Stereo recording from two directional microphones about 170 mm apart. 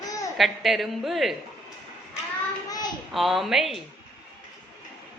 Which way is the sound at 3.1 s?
Centre (ahead or behind).